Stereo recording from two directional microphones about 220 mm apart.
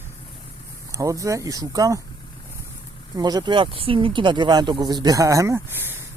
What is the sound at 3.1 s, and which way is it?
Speech, 20° right (ahead or behind).